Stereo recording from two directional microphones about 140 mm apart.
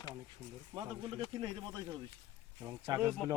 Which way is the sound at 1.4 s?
35° right (ahead or behind).